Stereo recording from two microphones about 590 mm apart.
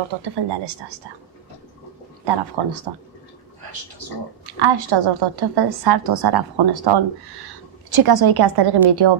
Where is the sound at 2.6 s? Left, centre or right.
Right.